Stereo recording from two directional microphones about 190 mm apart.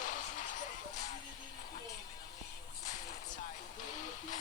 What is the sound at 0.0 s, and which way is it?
Music, 45° left (ahead or behind).